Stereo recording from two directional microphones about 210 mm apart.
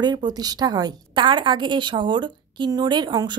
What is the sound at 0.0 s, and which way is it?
A woman's voice, 20° right (ahead or behind).